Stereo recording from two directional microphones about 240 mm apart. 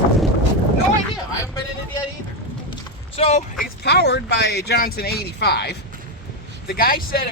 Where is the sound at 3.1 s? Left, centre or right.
Left.